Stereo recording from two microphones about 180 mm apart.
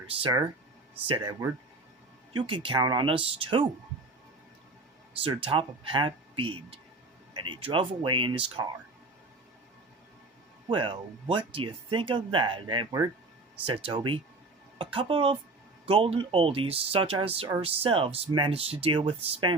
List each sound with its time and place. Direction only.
0.2 s speech: 25° right (ahead or behind)
5.4 s speech: 30° right (ahead or behind)
10.7 s speech: 25° right (ahead or behind)